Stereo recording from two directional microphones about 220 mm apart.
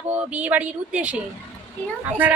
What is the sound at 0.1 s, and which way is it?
Speech, 5° right (ahead or behind).